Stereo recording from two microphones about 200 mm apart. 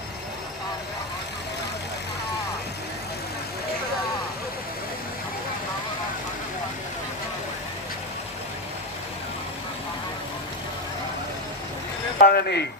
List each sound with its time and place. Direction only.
12.2 s speech: 50° left (ahead or behind)